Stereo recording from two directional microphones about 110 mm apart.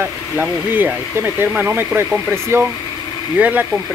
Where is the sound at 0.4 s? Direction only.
15° right (ahead or behind).